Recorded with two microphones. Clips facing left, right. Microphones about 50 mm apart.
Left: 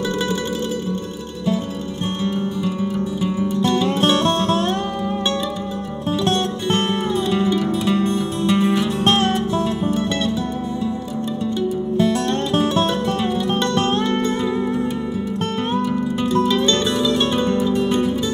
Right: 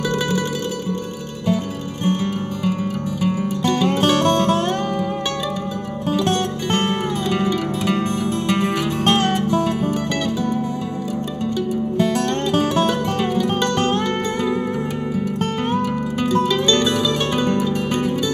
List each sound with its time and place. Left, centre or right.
2.8 s music: right
7.6 s music: right